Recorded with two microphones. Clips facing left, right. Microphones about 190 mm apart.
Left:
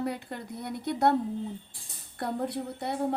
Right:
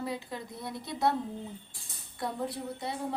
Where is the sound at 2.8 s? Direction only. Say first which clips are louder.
Left 7 dB; 60° left (ahead or behind).